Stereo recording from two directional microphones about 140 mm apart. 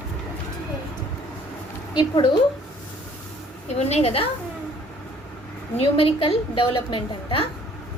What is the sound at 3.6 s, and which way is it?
Speech, 50° left (ahead or behind).